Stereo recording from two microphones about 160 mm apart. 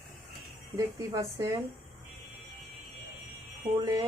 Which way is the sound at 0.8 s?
20° right (ahead or behind).